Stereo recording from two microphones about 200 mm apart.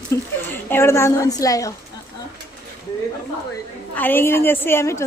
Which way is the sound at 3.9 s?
10° left (ahead or behind).